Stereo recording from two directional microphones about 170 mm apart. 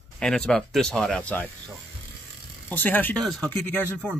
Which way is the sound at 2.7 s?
10° left (ahead or behind).